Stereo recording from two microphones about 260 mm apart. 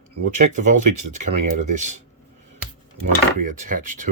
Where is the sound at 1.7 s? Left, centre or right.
Right.